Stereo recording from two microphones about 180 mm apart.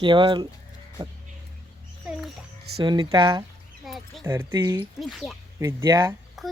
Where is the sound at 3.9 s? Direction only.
Centre (ahead or behind).